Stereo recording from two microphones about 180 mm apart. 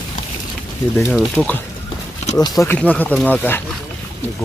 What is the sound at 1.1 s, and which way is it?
Speech, 5° left (ahead or behind).